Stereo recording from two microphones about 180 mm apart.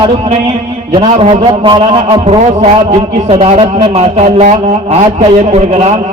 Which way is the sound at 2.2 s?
40° right (ahead or behind).